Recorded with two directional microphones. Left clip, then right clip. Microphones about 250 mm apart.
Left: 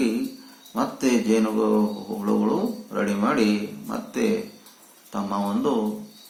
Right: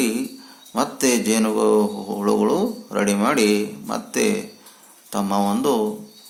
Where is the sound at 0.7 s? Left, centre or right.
Right.